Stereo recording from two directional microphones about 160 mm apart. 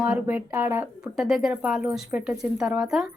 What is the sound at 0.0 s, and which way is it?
Speech, 10° right (ahead or behind).